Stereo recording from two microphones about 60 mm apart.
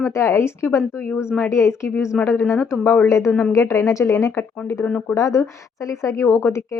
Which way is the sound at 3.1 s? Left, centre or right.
Left.